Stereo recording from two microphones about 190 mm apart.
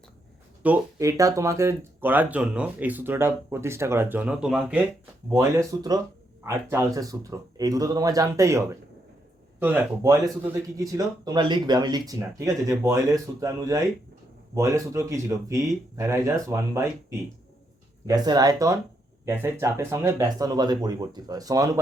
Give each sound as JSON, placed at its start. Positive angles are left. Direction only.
{"t": 0.6, "sound": "speech", "side_deg": -10}
{"t": 5.3, "sound": "speech", "side_deg": -15}